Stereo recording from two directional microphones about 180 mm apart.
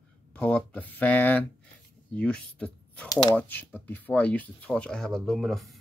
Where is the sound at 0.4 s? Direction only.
5° left (ahead or behind).